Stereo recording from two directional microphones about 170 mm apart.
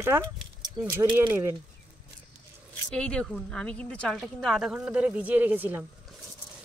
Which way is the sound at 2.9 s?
5° left (ahead or behind).